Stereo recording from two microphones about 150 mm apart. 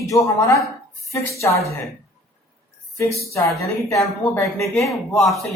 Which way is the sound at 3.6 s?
20° left (ahead or behind).